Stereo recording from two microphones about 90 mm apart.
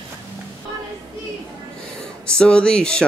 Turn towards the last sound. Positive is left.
turn(degrees=10)  # may be behind; listen again after turning